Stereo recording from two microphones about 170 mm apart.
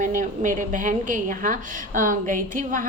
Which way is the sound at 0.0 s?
50° right (ahead or behind).